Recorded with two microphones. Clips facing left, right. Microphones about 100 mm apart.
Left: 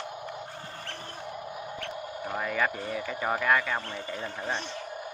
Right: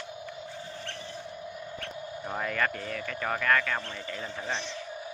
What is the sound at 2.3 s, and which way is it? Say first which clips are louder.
Speech: left 1 dB; 5° left (ahead or behind).